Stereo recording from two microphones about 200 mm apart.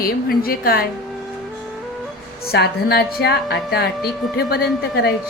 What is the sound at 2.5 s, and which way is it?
A woman's voice, 50° left (ahead or behind).